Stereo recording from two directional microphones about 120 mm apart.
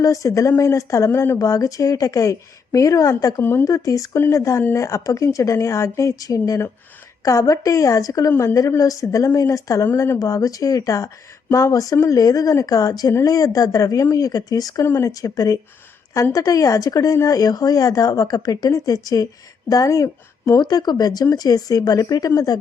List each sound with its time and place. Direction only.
0.0 s speech: 25° left (ahead or behind)